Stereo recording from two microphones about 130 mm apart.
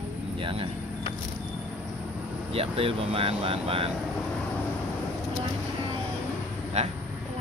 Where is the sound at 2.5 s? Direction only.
50° right (ahead or behind).